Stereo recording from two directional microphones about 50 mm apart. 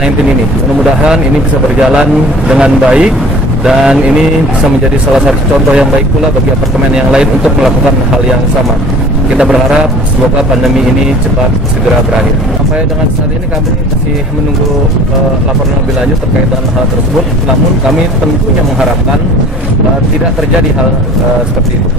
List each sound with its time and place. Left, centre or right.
0.7 s speech: centre
2.4 s speech: centre
7.0 s speech: centre
9.4 s speech: centre